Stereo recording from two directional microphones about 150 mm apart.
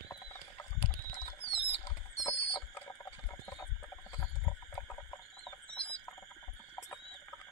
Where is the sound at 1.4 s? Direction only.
40° left (ahead or behind).